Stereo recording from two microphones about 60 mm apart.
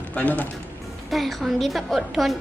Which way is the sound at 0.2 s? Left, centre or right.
Left.